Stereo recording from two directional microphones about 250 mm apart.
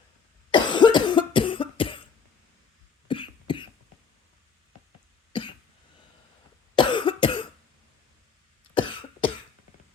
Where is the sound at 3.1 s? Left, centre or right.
Centre.